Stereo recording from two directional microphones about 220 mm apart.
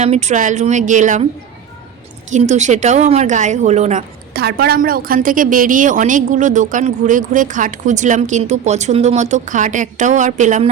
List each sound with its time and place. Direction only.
0.0 s a woman's voice: 30° right (ahead or behind)
2.3 s a woman's voice: 30° right (ahead or behind)
4.4 s a woman's voice: 45° right (ahead or behind)